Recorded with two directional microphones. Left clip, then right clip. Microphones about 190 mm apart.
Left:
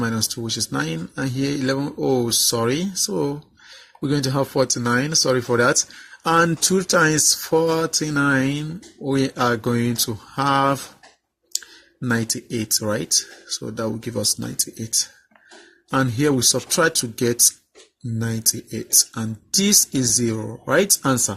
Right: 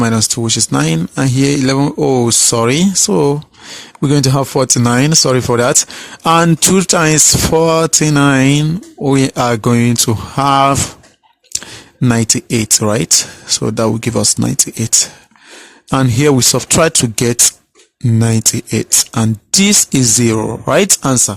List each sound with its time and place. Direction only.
0.4 s speech: 45° right (ahead or behind)
12.0 s speech: 45° right (ahead or behind)
15.9 s speech: 45° right (ahead or behind)